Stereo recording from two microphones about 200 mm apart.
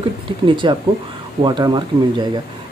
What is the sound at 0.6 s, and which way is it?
Speech, 25° right (ahead or behind).